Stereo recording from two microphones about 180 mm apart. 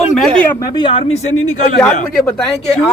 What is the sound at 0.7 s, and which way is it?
Speech, 25° left (ahead or behind).